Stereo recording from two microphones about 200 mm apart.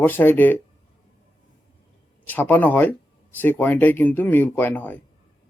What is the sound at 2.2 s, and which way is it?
Speech, 10° left (ahead or behind).